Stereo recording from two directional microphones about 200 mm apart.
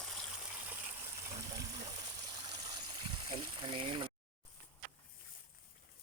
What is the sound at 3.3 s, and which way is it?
Speech, 25° right (ahead or behind).